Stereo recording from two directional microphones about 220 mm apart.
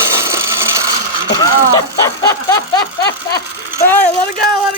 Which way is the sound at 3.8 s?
10° left (ahead or behind).